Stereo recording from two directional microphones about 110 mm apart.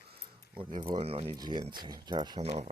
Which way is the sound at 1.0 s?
60° right (ahead or behind).